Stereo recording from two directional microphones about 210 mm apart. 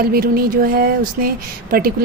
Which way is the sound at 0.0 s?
45° right (ahead or behind).